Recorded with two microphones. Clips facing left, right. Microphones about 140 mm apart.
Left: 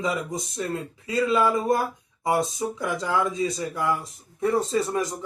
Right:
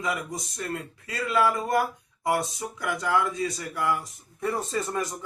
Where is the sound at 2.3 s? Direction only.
25° left (ahead or behind).